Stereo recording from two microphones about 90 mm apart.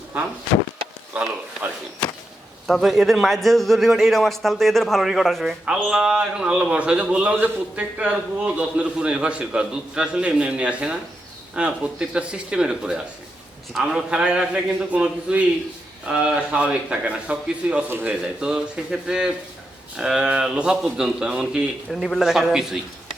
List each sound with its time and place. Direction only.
1.1 s a man's voice: 15° right (ahead or behind)
2.6 s a man's voice: centre (ahead or behind)
17.8 s a man's voice: 25° right (ahead or behind)
18.1 s a man's voice: 10° right (ahead or behind)
21.8 s a man's voice: 5° left (ahead or behind)